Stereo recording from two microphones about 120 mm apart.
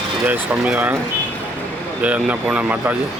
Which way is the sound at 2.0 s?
10° right (ahead or behind).